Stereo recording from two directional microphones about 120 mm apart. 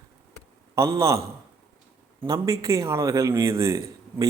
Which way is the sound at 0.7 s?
25° right (ahead or behind).